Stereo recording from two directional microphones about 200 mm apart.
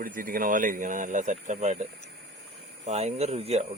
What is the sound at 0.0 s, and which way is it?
Speech, 45° right (ahead or behind).